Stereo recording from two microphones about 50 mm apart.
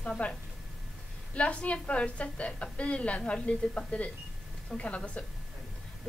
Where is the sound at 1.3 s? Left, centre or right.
Left.